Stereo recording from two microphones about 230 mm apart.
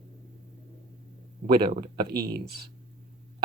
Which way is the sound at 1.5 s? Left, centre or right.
Right.